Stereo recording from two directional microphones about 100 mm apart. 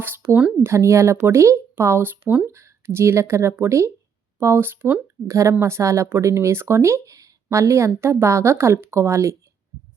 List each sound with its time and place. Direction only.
0.0 s speech: 20° right (ahead or behind)